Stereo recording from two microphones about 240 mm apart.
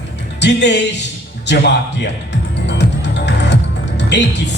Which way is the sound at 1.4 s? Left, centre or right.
Left.